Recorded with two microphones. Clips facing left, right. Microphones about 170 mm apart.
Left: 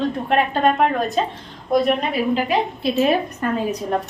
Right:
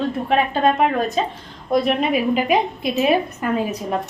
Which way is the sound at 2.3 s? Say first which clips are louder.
Right 2 dB; 15° right (ahead or behind).